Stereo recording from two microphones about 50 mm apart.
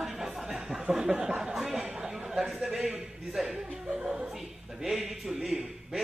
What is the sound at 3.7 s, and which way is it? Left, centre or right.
Chuckle, right.